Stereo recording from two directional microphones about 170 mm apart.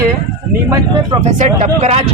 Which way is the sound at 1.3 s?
45° right (ahead or behind).